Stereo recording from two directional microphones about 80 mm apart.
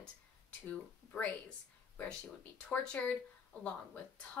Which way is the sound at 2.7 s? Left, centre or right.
Centre.